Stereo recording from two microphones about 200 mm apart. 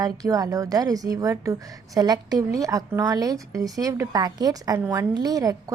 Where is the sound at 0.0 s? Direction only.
15° right (ahead or behind).